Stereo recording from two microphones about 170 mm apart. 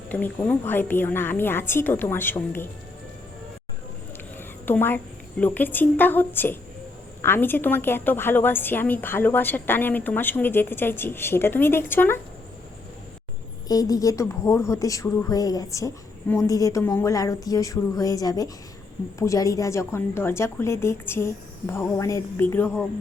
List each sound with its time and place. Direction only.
0.1 s a woman's voice: 10° left (ahead or behind)
4.4 s a sound: 10° left (ahead or behind)
5.4 s a woman's voice: 10° left (ahead or behind)
13.7 s a woman's voice: 20° left (ahead or behind)